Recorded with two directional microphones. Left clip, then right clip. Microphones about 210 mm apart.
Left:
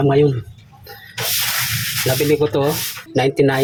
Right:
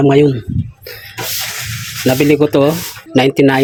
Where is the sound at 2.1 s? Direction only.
45° right (ahead or behind).